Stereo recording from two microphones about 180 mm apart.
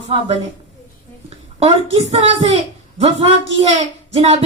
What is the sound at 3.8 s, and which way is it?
Speech, 35° right (ahead or behind).